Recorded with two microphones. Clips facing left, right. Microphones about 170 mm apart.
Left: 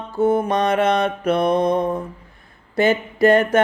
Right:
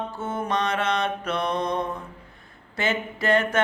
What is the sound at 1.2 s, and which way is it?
Mantra, 55° left (ahead or behind).